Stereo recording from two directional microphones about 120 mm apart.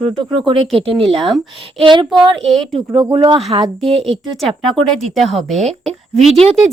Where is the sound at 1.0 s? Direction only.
Centre (ahead or behind).